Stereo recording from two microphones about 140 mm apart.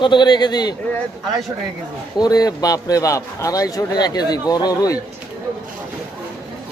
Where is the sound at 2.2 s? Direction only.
25° left (ahead or behind).